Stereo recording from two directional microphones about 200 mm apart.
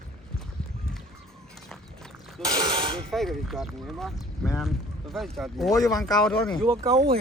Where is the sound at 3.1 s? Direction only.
Centre (ahead or behind).